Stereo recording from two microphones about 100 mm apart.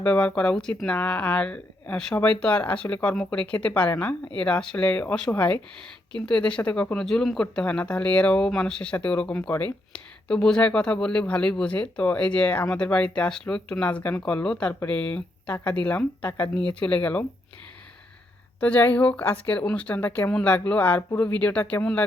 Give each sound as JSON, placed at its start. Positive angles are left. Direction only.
{"t": 0.0, "sound": "speech", "side_deg": 10}
{"t": 18.6, "sound": "speech", "side_deg": 15}